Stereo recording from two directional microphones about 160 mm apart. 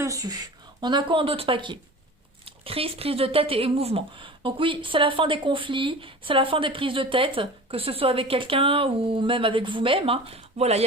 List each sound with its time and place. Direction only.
0.0 s speech: 20° right (ahead or behind); by 10.8 s 40° right (ahead or behind)